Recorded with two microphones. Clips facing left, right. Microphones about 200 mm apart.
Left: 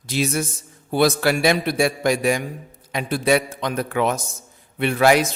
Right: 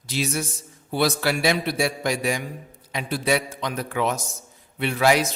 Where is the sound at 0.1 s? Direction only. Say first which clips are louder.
Left 4 dB; 50° left (ahead or behind).